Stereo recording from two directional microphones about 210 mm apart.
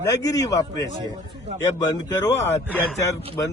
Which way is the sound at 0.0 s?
15° left (ahead or behind).